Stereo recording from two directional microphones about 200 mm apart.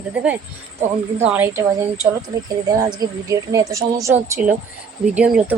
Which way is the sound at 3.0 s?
15° right (ahead or behind).